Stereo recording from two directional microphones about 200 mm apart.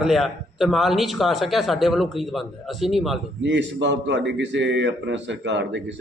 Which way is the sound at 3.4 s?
65° right (ahead or behind).